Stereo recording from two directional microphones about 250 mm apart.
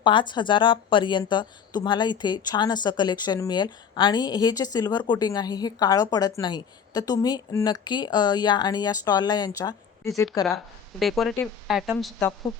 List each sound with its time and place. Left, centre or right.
0.0 s a woman's voice: centre
11.0 s speech: centre